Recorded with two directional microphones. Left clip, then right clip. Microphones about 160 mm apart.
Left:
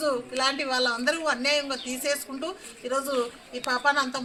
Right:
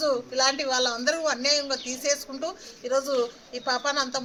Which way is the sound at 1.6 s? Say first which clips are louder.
Right 2 dB; 20° right (ahead or behind).